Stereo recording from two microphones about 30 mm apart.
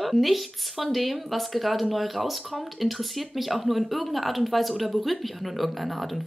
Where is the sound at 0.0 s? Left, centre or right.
Centre.